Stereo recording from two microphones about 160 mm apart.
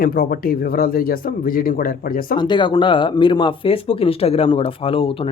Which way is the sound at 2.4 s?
30° left (ahead or behind).